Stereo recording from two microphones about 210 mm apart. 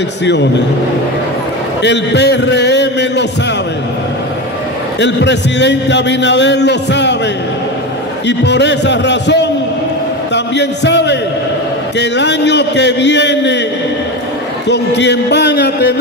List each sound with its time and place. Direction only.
0.2 s a man's voice: 55° left (ahead or behind)
1.8 s a man's voice: 55° left (ahead or behind)
5.0 s a man's voice: 55° left (ahead or behind)
8.3 s a man's voice: 55° left (ahead or behind)
14.7 s speech: 55° left (ahead or behind)